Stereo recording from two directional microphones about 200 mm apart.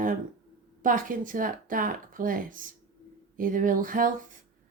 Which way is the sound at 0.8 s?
45° right (ahead or behind).